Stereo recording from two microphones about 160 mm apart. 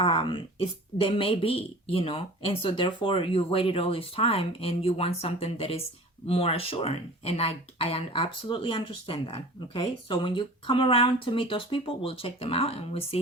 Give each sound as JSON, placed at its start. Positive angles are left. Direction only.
{"t": 0.0, "sound": "speech", "side_deg": 35}